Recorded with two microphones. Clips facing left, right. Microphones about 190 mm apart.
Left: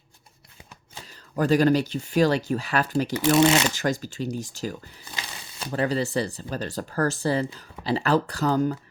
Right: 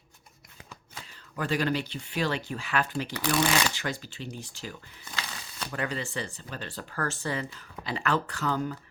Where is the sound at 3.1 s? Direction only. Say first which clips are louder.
Left 8 dB; 25° left (ahead or behind).